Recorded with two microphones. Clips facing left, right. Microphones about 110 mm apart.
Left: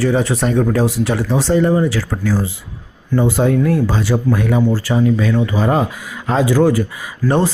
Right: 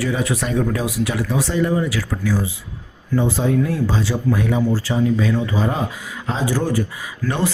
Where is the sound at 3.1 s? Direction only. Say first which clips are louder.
Left 4 dB; 65° left (ahead or behind).